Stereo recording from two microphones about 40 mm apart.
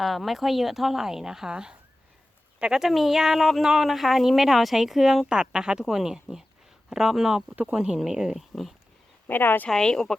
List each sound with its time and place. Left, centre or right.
0.0 s a woman's voice: centre
2.7 s a woman's voice: centre
5.2 s a woman's voice: right
7.6 s speech: right
8.0 s a woman's voice: centre
8.4 s speech: centre
9.2 s speech: left
9.6 s speech: centre